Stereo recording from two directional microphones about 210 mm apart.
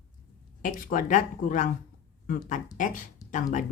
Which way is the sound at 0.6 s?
40° left (ahead or behind).